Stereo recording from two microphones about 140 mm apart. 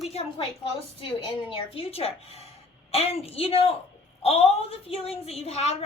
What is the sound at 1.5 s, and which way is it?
A woman's voice, 40° left (ahead or behind).